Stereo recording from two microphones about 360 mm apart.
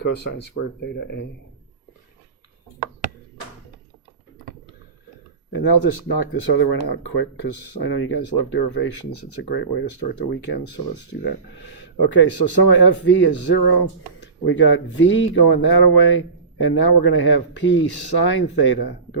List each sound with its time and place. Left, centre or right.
0.3 s speech: left
0.5 s speech: left
5.5 s a man's voice: left